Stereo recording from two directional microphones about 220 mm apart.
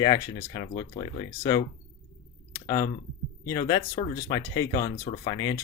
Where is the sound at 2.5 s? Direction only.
15° left (ahead or behind).